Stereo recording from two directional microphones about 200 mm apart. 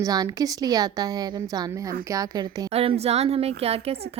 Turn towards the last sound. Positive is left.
turn(degrees=-30)  # may be behind; listen again after turning